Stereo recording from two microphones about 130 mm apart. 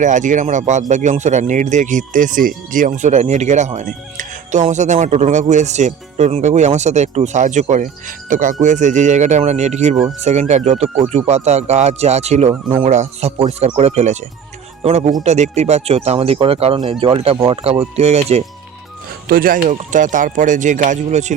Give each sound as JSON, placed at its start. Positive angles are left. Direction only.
{"t": 0.0, "sound": "speech", "side_deg": -75}
{"t": 8.6, "sound": "speech", "side_deg": -70}
{"t": 12.8, "sound": "speech", "side_deg": -65}
{"t": 13.5, "sound": "speech", "side_deg": -55}
{"t": 17.5, "sound": "speech", "side_deg": -50}
{"t": 19.6, "sound": "speech", "side_deg": -75}